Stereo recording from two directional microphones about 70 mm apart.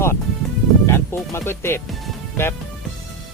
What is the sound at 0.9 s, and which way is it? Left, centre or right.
Speech, left.